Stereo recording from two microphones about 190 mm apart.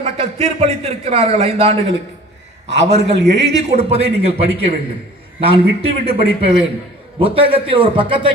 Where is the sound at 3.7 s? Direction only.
30° right (ahead or behind).